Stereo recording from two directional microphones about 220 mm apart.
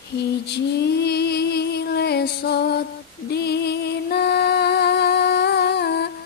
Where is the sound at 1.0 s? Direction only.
50° left (ahead or behind).